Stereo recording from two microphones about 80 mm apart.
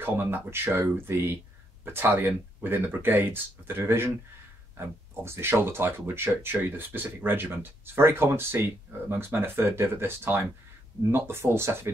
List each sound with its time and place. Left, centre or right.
0.0 s speech: right